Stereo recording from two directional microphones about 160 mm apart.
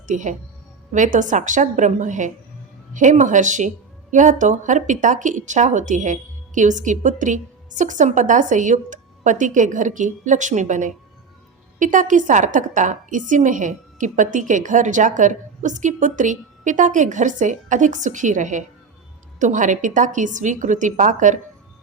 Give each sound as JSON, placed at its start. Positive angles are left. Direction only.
{"t": 0.1, "sound": "a woman's voice", "side_deg": -50}